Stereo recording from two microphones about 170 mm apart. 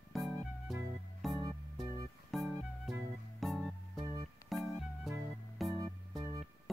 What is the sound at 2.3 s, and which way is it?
Music, centre (ahead or behind).